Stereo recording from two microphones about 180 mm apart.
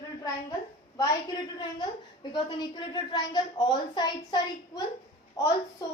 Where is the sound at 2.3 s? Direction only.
25° left (ahead or behind).